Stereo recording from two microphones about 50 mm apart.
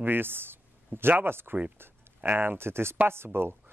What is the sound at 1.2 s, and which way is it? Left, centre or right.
Speech, right.